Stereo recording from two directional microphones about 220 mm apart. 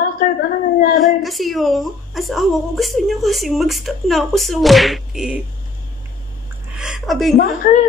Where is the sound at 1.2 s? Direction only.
Centre (ahead or behind).